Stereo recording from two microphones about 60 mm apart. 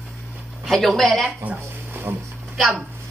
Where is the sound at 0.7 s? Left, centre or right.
Centre.